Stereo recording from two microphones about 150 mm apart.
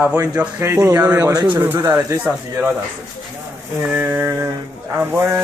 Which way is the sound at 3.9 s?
10° right (ahead or behind).